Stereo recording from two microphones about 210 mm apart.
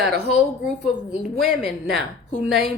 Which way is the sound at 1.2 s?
5° right (ahead or behind).